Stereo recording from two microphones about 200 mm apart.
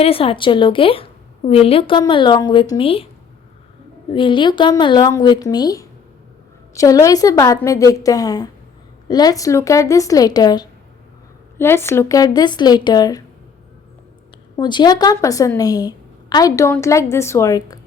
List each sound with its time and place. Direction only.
0.0 s speech: 30° left (ahead or behind)
4.1 s speech: 25° left (ahead or behind)
14.5 s speech: 20° left (ahead or behind)